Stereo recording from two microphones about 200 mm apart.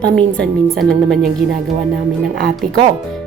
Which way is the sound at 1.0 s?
Centre (ahead or behind).